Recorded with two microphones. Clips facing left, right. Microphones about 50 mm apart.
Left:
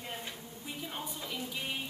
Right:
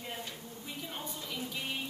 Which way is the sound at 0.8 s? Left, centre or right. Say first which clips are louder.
Left 2 dB; centre.